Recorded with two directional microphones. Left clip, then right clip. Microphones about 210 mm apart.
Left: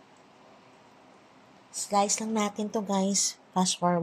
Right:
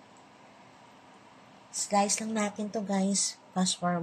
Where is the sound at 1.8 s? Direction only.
25° left (ahead or behind).